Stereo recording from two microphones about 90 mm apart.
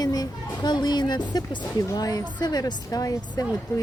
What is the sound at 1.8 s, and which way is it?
Speech, 45° left (ahead or behind).